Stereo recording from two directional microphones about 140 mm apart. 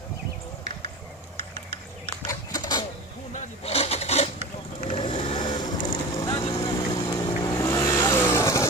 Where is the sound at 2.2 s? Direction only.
25° left (ahead or behind).